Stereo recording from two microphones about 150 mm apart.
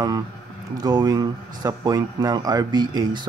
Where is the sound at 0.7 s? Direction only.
25° right (ahead or behind).